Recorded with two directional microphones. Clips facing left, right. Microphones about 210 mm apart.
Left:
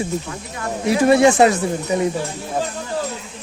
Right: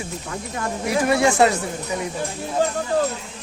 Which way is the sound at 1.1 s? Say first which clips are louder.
Left 5 dB; 20° left (ahead or behind).